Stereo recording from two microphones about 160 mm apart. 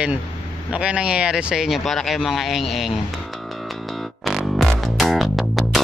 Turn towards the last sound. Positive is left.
turn(degrees=0)  # may be behind; listen again after turning